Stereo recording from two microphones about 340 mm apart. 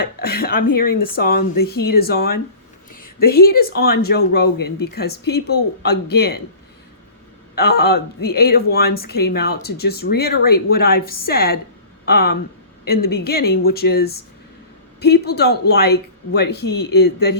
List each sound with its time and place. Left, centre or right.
0.0 s speech: left
7.5 s speech: left